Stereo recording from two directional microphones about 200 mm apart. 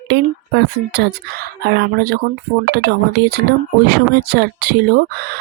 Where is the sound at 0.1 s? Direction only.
55° right (ahead or behind).